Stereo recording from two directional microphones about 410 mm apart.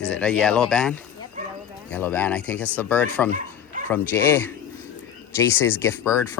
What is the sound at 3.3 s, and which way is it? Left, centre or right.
Bow-wow, centre.